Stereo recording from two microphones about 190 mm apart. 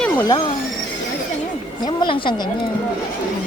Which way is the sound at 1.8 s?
25° left (ahead or behind).